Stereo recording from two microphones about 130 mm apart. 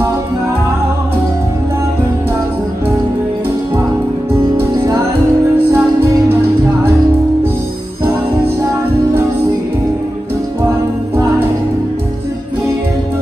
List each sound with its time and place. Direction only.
4.6 s music: 25° right (ahead or behind)
8.0 s jingle bell: 20° right (ahead or behind)